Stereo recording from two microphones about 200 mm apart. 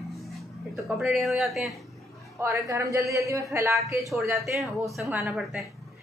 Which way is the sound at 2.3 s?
15° right (ahead or behind).